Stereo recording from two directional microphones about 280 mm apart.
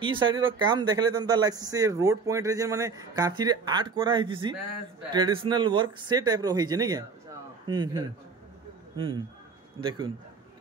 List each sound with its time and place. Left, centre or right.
0.0 s speech: centre